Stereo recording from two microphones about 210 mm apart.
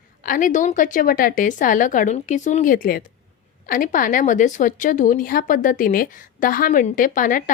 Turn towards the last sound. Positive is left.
turn(degrees=40)  # may be behind; listen again after turning